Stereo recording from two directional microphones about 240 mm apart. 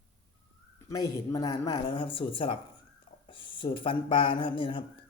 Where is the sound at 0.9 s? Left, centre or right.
Centre.